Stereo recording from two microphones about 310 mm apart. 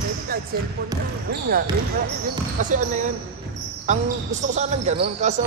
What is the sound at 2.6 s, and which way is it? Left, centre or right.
Speech, right.